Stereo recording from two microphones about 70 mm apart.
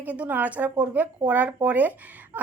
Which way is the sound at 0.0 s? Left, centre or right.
Right.